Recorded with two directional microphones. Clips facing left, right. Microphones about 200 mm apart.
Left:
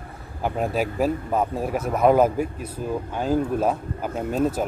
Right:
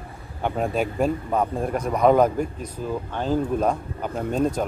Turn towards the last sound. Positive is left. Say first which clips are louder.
# even
turn(degrees=5)  # may be behind; listen again after turning